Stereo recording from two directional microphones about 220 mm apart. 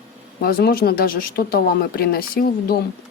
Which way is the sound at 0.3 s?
45° left (ahead or behind).